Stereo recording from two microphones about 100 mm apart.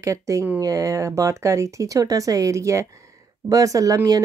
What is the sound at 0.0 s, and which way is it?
Speech, 30° right (ahead or behind).